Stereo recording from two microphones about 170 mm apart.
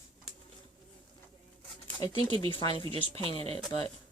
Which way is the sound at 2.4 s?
30° left (ahead or behind).